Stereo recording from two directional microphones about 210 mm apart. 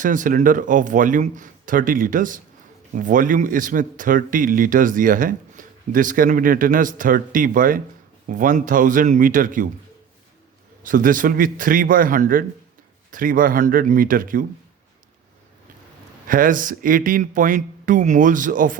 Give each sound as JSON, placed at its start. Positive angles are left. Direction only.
{"t": 0.0, "sound": "a man's voice", "side_deg": -40}
{"t": 10.8, "sound": "a man's voice", "side_deg": -40}
{"t": 16.2, "sound": "a man's voice", "side_deg": -40}